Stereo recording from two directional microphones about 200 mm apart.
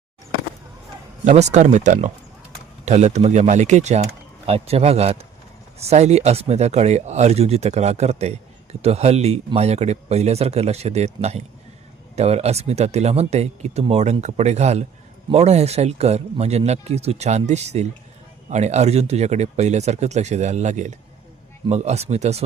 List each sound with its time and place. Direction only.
1.2 s speech: 35° right (ahead or behind)